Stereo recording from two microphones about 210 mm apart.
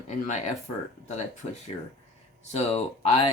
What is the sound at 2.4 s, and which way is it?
Speech, 30° left (ahead or behind).